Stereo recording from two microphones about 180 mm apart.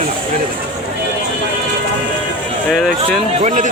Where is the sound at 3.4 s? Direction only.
45° right (ahead or behind).